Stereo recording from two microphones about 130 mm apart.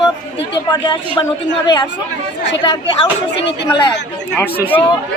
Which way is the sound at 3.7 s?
35° left (ahead or behind).